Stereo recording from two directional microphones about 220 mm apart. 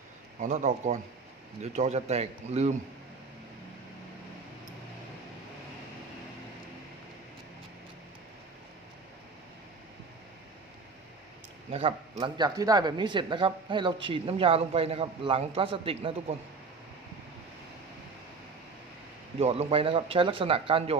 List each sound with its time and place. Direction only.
0.3 s speech: 30° right (ahead or behind)
11.7 s speech: 25° right (ahead or behind)
19.4 s speech: 25° right (ahead or behind)